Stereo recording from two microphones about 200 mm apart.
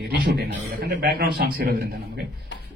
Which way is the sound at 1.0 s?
50° right (ahead or behind).